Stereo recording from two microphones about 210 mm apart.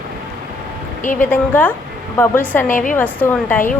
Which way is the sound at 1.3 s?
10° left (ahead or behind).